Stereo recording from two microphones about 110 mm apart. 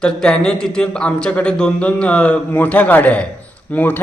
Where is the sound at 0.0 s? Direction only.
10° left (ahead or behind).